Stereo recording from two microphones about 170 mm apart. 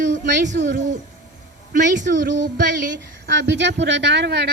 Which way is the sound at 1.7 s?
50° right (ahead or behind).